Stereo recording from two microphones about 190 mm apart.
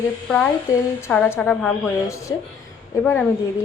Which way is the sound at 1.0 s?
10° left (ahead or behind).